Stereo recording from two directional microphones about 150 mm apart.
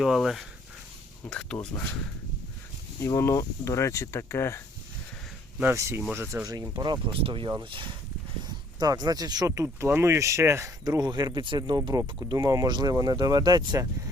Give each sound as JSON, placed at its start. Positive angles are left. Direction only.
{"t": 0.0, "sound": "speech", "side_deg": 0}
{"t": 3.0, "sound": "speech", "side_deg": 20}
{"t": 5.5, "sound": "speech", "side_deg": -15}